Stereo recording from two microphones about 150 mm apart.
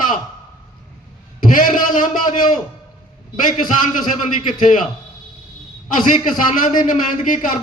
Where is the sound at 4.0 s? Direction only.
60° left (ahead or behind).